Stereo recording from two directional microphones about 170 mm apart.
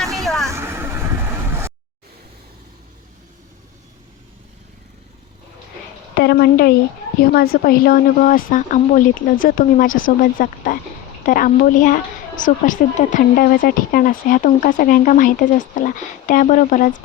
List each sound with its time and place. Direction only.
0.3 s vehicle: centre (ahead or behind)
0.5 s vehicle: 15° right (ahead or behind)
6.1 s a woman's voice: 65° left (ahead or behind); by 16.9 s 50° left (ahead or behind)